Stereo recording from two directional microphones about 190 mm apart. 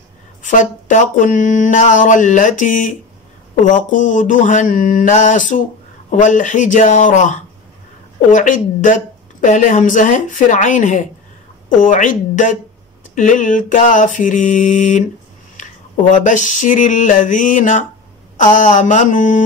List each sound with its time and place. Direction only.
0.4 s a woman's voice: 40° left (ahead or behind)
16.1 s a woman's voice: 40° left (ahead or behind)